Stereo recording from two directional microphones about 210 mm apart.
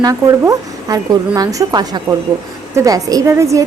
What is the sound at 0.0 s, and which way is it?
A woman's voice, 15° right (ahead or behind).